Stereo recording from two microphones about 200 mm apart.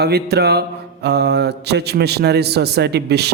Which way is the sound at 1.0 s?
55° right (ahead or behind).